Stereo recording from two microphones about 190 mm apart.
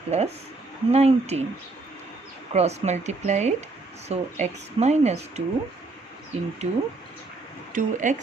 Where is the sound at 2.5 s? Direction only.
35° right (ahead or behind).